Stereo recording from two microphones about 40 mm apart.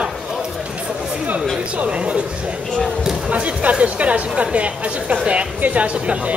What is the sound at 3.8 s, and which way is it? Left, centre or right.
Music, right.